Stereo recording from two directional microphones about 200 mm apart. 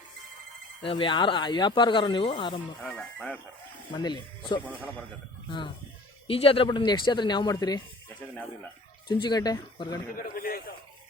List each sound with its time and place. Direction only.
0.8 s speech: 25° left (ahead or behind)
2.8 s speech: 5° left (ahead or behind)
3.9 s speech: 20° left (ahead or behind)
9.2 s speech: 20° left (ahead or behind)
10.2 s a man's voice: 45° left (ahead or behind)